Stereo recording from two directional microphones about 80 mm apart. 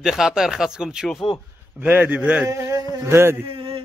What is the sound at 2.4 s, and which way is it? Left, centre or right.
Speech, right.